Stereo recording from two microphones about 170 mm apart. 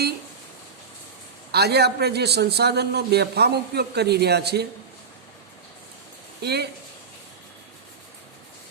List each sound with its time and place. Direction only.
1.5 s a man's voice: 70° right (ahead or behind)
6.4 s speech: 75° right (ahead or behind)